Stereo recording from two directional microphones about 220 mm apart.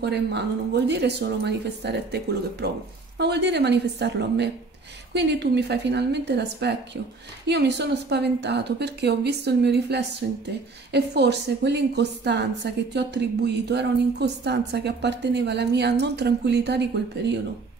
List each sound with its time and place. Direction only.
0.0 s a woman's voice: 50° right (ahead or behind)